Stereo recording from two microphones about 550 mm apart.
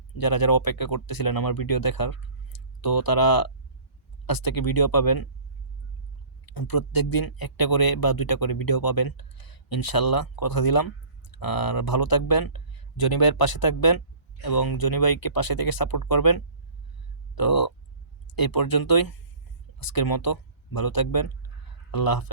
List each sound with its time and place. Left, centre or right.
0.2 s speech: left
6.4 s speech: left